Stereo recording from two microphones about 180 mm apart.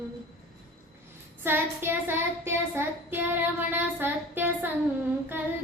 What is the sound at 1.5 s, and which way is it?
Child singing, 10° right (ahead or behind).